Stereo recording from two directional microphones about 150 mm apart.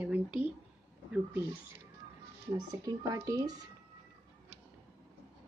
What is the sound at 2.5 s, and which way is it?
Speech, 25° right (ahead or behind).